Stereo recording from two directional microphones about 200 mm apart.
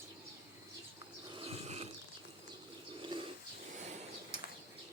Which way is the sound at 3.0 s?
25° right (ahead or behind).